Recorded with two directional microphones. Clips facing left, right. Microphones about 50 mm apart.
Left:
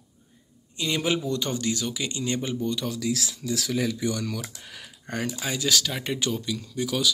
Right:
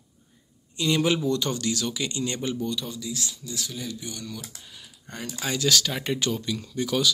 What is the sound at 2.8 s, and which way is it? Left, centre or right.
Speech, left.